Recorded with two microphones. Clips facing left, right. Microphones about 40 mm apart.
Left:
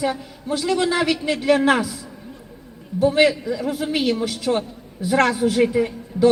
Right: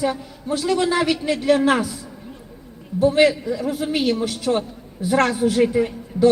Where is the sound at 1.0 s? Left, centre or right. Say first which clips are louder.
Even; centre.